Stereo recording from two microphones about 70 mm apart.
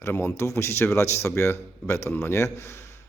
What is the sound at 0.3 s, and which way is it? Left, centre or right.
Speech, left.